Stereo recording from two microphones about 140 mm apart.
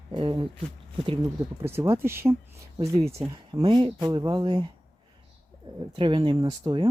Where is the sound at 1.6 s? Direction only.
20° right (ahead or behind).